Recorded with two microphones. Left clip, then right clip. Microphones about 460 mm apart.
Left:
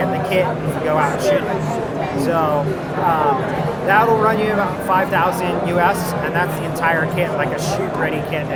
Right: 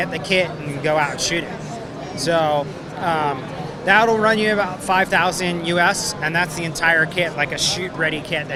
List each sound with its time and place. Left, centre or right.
0.9 s speech: right
3.8 s speech: right